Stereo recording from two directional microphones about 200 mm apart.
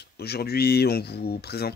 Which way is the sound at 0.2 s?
50° left (ahead or behind).